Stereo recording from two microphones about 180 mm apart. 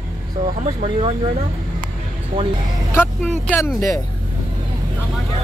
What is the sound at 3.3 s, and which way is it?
Speech, 10° left (ahead or behind).